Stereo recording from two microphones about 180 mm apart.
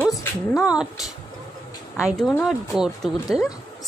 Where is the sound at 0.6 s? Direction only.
5° right (ahead or behind).